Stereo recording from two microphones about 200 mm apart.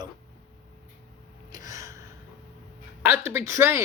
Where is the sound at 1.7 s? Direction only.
15° right (ahead or behind).